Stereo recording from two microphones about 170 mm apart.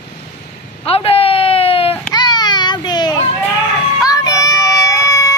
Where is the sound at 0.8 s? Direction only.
35° left (ahead or behind); by 5.3 s 20° left (ahead or behind).